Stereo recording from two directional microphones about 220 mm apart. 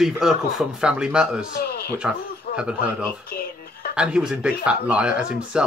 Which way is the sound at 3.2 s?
45° left (ahead or behind).